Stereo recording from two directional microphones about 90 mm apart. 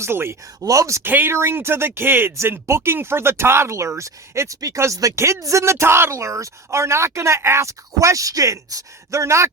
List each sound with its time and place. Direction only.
0.0 s speech: 30° right (ahead or behind)